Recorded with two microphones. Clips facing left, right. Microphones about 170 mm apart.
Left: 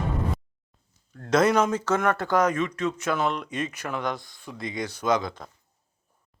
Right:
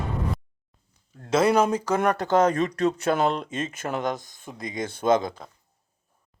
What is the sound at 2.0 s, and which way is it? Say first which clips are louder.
Speech: right 4 dB; 20° right (ahead or behind).